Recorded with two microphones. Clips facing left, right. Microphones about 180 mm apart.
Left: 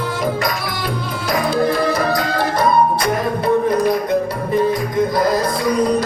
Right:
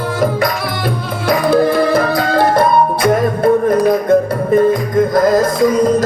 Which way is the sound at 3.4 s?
50° right (ahead or behind).